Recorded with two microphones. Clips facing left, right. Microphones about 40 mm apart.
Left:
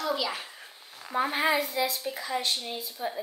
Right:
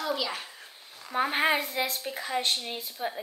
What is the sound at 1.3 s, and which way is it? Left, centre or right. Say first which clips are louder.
A woman's voice: even; right.